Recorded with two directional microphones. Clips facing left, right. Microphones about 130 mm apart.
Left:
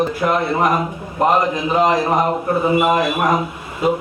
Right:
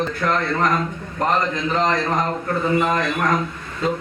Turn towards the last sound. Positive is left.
turn(degrees=15)  # may be behind; listen again after turning